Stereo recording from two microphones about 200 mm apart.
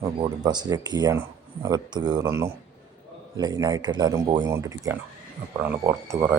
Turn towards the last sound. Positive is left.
turn(degrees=-15)  # may be behind; listen again after turning